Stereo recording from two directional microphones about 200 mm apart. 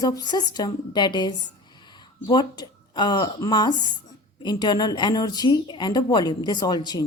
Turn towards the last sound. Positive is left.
turn(degrees=20)  # may be behind; listen again after turning